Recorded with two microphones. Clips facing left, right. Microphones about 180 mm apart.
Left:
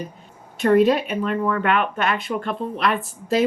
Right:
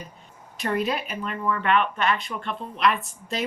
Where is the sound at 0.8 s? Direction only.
Centre (ahead or behind).